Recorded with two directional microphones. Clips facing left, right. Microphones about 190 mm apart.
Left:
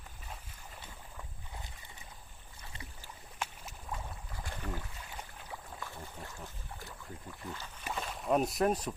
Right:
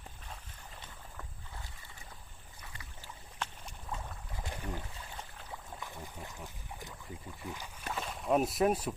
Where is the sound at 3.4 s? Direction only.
5° left (ahead or behind).